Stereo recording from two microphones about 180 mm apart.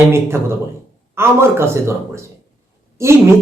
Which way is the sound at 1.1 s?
15° right (ahead or behind).